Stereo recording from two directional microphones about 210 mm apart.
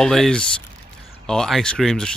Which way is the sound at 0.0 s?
Centre (ahead or behind).